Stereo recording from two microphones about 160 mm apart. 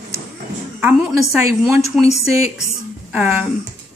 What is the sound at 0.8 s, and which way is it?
Speech, 5° right (ahead or behind).